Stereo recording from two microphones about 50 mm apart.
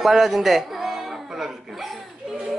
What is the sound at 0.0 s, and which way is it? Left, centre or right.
Speech, centre.